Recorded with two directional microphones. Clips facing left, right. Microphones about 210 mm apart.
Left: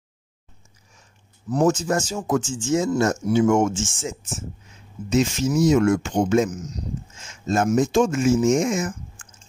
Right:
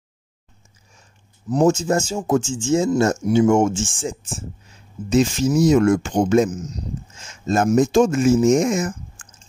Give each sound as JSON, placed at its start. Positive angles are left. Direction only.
{"t": 1.5, "sound": "speech", "side_deg": -25}